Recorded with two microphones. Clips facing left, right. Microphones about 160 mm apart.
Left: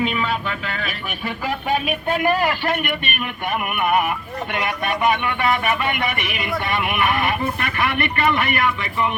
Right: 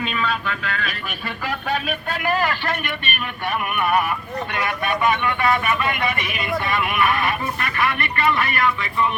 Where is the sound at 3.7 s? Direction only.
20° left (ahead or behind).